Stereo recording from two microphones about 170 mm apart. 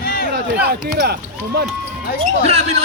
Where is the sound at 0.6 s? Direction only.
65° right (ahead or behind).